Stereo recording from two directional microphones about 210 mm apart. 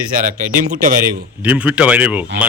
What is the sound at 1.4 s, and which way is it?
Speech, 5° right (ahead or behind).